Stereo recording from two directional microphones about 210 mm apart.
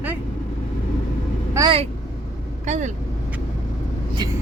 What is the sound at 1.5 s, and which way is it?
Speech, 20° right (ahead or behind).